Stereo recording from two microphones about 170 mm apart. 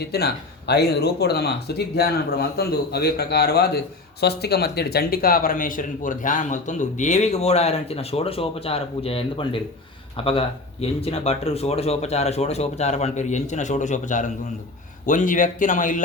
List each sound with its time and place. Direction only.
0.0 s speech: 70° left (ahead or behind); by 16.0 s 50° left (ahead or behind)